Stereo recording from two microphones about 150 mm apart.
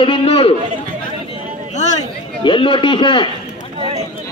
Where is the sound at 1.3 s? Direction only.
50° left (ahead or behind).